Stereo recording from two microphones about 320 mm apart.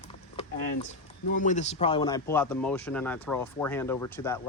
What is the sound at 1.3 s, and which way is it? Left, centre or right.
Speech, left.